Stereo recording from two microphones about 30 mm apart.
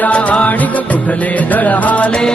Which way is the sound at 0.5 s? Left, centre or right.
Left.